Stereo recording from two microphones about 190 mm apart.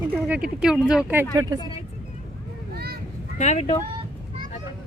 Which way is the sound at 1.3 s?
20° right (ahead or behind).